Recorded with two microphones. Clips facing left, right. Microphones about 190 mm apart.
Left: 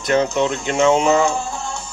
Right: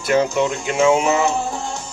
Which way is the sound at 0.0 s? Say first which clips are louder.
Even; 10° right (ahead or behind).